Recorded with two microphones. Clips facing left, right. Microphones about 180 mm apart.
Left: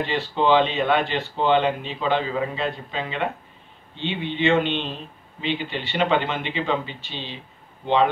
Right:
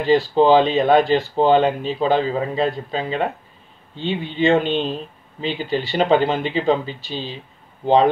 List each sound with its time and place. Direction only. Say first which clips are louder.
0.0 s speech: right 8 dB; 35° right (ahead or behind)